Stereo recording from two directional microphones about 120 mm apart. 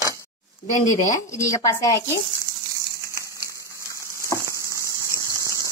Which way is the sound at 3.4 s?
25° right (ahead or behind).